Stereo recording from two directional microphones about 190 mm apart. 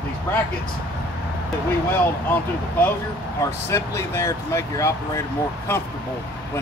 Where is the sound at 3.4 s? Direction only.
15° left (ahead or behind).